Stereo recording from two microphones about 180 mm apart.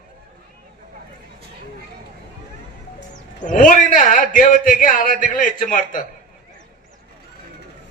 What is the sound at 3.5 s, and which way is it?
A man's voice, 45° left (ahead or behind).